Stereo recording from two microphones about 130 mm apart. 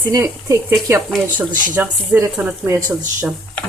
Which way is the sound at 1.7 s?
20° right (ahead or behind).